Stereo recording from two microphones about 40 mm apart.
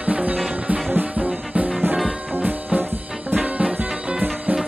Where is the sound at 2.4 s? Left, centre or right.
Right.